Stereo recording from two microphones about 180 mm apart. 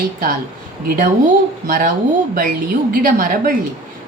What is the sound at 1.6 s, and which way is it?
Speech, 55° right (ahead or behind).